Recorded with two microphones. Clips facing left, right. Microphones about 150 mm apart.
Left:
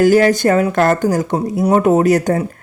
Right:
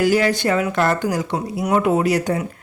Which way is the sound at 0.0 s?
45° left (ahead or behind).